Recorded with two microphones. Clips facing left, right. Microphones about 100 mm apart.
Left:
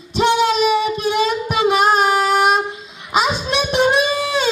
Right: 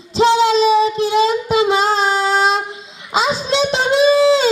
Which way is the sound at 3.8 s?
30° right (ahead or behind).